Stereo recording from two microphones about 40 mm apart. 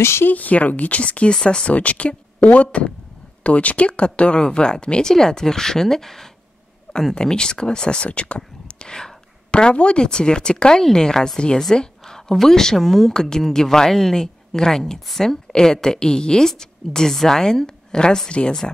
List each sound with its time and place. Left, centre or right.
0.0 s speech: left
0.3 s speech: left
1.3 s speech: centre
1.7 s a woman's voice: left